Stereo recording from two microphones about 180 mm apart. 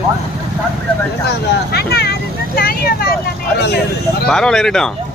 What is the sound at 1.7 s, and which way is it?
Vehicle, 65° left (ahead or behind).